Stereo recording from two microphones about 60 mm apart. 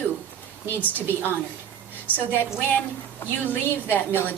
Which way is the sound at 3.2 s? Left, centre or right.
Left.